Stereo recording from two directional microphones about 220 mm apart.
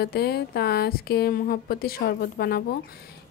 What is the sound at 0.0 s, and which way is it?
Speech, 45° left (ahead or behind).